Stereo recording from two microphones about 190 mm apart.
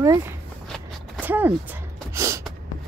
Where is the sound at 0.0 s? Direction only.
15° right (ahead or behind).